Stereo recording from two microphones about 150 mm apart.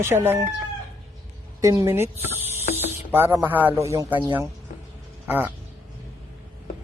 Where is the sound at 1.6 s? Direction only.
20° right (ahead or behind).